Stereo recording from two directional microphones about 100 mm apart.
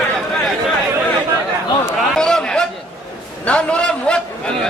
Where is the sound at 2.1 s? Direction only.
5° left (ahead or behind).